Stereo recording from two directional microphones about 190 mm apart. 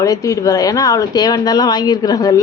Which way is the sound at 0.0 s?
15° left (ahead or behind).